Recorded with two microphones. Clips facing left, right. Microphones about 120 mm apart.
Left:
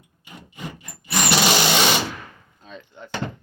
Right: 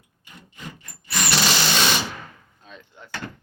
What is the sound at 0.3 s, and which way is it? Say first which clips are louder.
Wood: left 4 dB; 15° left (ahead or behind).